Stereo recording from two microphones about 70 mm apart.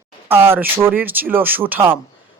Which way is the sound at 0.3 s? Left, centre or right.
Right.